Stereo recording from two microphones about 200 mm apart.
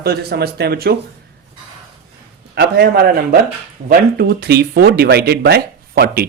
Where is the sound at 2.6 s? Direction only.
50° right (ahead or behind).